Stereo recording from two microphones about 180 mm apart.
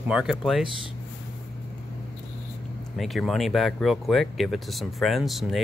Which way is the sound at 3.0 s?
Centre (ahead or behind).